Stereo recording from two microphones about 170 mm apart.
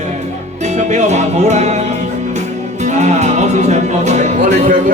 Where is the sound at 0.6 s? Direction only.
45° right (ahead or behind).